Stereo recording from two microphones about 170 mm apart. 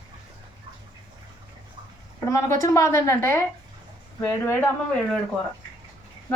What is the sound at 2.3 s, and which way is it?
A woman's voice, 20° left (ahead or behind).